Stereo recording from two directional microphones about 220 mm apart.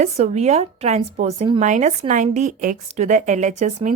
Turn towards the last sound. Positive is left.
turn(degrees=-35)  # may be behind; listen again after turning